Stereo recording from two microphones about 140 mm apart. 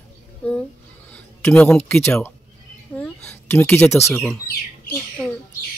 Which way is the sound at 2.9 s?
10° left (ahead or behind).